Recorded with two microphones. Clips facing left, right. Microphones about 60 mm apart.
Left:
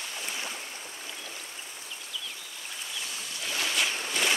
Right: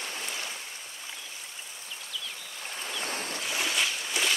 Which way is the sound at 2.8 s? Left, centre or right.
Right.